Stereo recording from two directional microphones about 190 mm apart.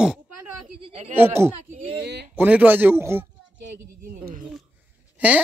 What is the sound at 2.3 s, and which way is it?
Speech, 10° right (ahead or behind).